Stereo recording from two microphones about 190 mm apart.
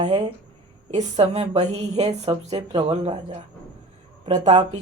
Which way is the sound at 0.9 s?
35° right (ahead or behind).